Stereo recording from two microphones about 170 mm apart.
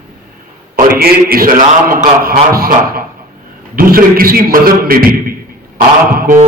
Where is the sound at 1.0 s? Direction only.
60° right (ahead or behind).